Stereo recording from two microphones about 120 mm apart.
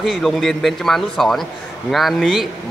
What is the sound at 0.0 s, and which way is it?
A man's voice, centre (ahead or behind).